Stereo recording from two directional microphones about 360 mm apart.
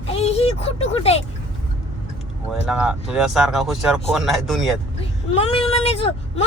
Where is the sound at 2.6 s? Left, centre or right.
Centre.